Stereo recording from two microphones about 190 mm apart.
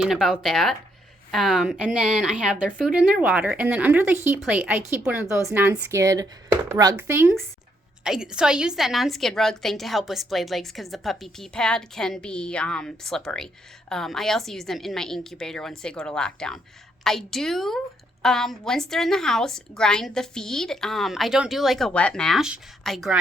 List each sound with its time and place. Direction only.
0.0 s a woman's voice: centre (ahead or behind)